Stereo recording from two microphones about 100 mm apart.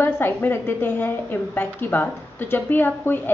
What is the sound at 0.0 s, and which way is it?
A woman's voice, 20° left (ahead or behind).